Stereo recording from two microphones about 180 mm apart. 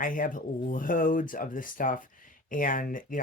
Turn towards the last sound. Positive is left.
turn(degrees=50)  # may be behind; listen again after turning